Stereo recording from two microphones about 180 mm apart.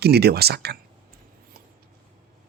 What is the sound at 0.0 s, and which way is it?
Speech, 65° right (ahead or behind).